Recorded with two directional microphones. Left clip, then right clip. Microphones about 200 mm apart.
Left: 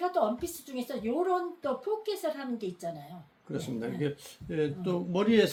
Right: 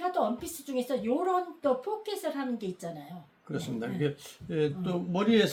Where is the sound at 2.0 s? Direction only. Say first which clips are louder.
Left 1 dB; 20° right (ahead or behind).